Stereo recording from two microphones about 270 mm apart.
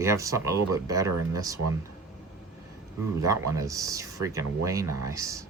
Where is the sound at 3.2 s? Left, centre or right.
Centre.